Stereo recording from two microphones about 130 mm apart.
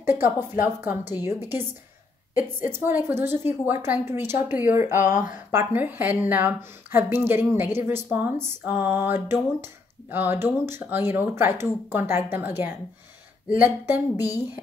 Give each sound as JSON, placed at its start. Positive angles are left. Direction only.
{"t": 0.0, "sound": "speech", "side_deg": -15}
{"t": 2.3, "sound": "speech", "side_deg": -15}
{"t": 5.0, "sound": "speech", "side_deg": 70}
{"t": 5.5, "sound": "speech", "side_deg": -15}
{"t": 14.2, "sound": "a woman's voice", "side_deg": 30}